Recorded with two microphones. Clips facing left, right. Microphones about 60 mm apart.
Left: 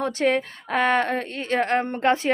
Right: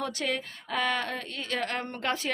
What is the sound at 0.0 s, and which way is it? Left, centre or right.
Speech, left.